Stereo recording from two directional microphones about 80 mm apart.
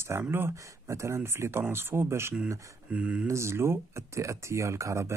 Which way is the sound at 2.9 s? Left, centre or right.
Centre.